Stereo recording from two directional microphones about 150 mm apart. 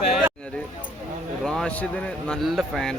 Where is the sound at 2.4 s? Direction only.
Centre (ahead or behind).